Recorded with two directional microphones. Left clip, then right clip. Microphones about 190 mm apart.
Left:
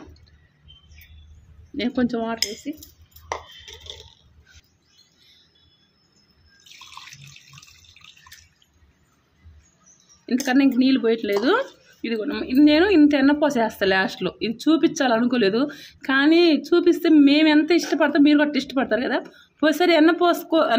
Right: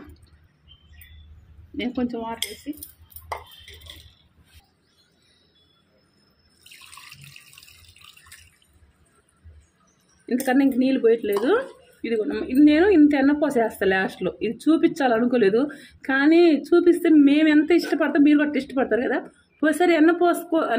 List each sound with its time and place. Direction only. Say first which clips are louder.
2.0 s cutlery: left 6 dB; 40° left (ahead or behind)
10.2 s speech: left 1 dB; 30° left (ahead or behind)